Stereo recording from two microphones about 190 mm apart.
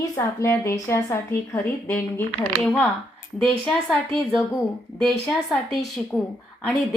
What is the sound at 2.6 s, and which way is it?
A woman's voice, 5° left (ahead or behind).